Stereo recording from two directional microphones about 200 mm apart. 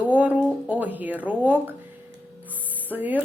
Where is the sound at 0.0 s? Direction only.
5° right (ahead or behind).